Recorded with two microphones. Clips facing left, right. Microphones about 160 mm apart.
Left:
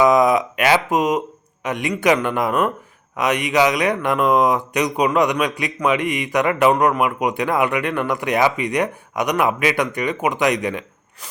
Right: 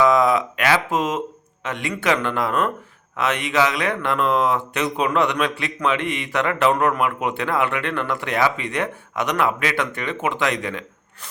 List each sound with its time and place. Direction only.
0.0 s speech: 20° left (ahead or behind)